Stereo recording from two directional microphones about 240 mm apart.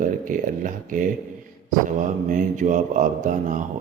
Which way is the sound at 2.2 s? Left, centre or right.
Right.